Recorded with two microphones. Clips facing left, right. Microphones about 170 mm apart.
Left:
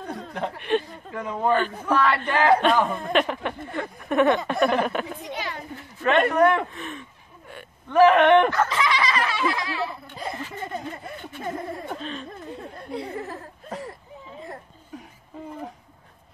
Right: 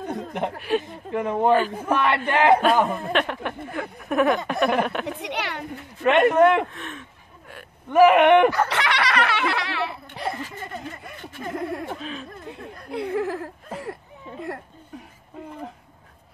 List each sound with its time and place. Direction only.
0.0 s a sound: 20° right (ahead or behind)
0.6 s speech: 5° right (ahead or behind)
1.9 s speech: 20° right (ahead or behind)
2.6 s speech: 5° right (ahead or behind)
5.0 s a child's voice: 70° right (ahead or behind)
6.1 s speech: 20° right (ahead or behind)
6.7 s a sound: centre (ahead or behind)
7.9 s speech: 15° right (ahead or behind)
8.6 s a child's voice: 70° right (ahead or behind)
11.9 s speech: 5° right (ahead or behind)
12.9 s a child's voice: 70° right (ahead or behind)